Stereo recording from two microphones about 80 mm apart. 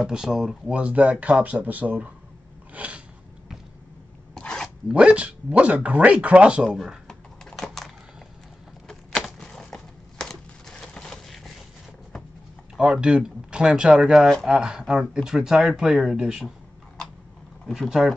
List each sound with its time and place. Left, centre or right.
0.0 s speech: centre
2.7 s a sound: centre
4.4 s zipper: centre
4.8 s speech: centre
7.1 s computer keyboard: centre
8.8 s a sound: centre
12.7 s speech: centre
17.7 s speech: centre